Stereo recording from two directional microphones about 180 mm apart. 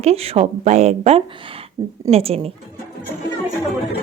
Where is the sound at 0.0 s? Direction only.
35° right (ahead or behind).